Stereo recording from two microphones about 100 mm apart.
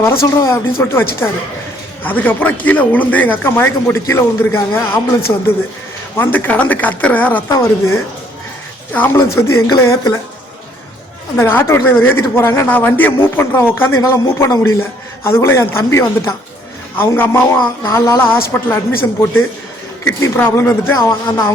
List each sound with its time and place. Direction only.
0.0 s a man's voice: 25° left (ahead or behind)
7.4 s a man's voice: 25° left (ahead or behind)
11.3 s a man's voice: 25° left (ahead or behind)